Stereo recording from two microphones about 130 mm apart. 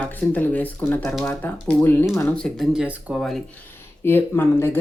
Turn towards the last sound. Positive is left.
turn(degrees=20)  # may be behind; listen again after turning